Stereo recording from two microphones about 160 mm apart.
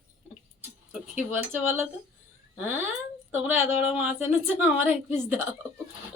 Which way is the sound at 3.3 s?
10° right (ahead or behind).